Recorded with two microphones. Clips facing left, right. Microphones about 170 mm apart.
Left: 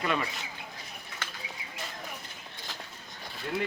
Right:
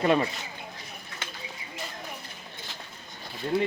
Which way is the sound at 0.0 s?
35° right (ahead or behind).